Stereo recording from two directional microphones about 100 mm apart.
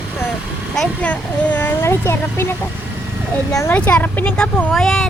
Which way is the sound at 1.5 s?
15° left (ahead or behind).